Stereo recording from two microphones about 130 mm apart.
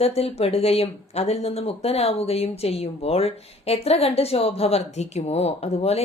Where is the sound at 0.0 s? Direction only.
50° left (ahead or behind).